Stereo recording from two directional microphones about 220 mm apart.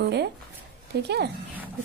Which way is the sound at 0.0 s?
50° right (ahead or behind).